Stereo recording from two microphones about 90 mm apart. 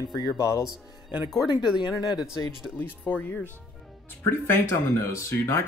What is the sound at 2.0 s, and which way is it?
Speech, 55° left (ahead or behind).